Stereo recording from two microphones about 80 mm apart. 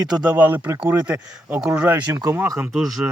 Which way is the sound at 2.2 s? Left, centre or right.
Right.